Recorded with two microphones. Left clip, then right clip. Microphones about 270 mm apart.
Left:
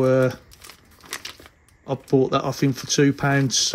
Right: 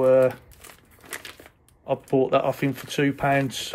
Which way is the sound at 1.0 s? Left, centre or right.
Centre.